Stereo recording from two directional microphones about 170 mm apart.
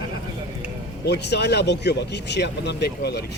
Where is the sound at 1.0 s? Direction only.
85° left.